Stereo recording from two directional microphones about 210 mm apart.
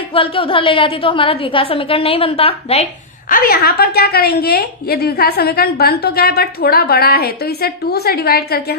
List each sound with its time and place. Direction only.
0.1 s a woman's voice: 25° left (ahead or behind)
3.2 s a woman's voice: 45° left (ahead or behind)